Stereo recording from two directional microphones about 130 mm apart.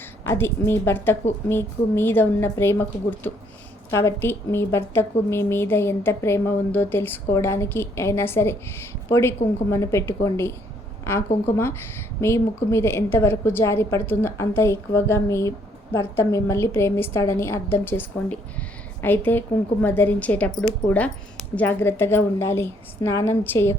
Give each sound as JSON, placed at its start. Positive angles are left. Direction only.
{"t": 0.3, "sound": "a woman's voice", "side_deg": 20}